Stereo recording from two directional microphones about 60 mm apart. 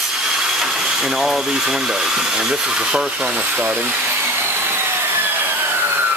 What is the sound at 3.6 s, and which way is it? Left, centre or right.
Vacuum cleaner, right.